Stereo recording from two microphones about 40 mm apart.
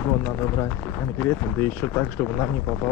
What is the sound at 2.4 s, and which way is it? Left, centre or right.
Speech, left.